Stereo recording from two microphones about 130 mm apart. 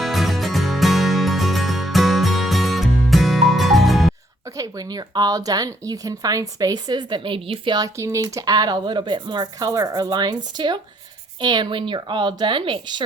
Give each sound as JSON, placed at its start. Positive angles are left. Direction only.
{"t": 0.0, "sound": "music", "side_deg": 0}
{"t": 4.5, "sound": "speech", "side_deg": -30}
{"t": 7.9, "sound": "speech", "side_deg": -25}